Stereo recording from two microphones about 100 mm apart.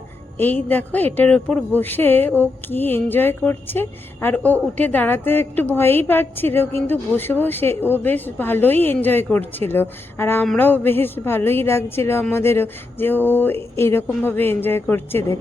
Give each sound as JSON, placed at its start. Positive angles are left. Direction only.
{"t": 0.3, "sound": "a woman's voice", "side_deg": 20}